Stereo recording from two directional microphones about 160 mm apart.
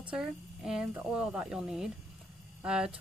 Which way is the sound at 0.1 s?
5° right (ahead or behind).